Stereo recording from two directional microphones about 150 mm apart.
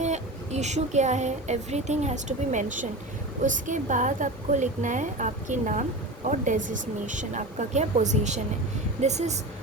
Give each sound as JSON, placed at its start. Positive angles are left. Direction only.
{"t": 0.0, "sound": "a woman's voice", "side_deg": -50}